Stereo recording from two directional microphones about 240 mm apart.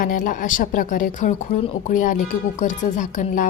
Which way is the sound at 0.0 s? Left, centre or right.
Left.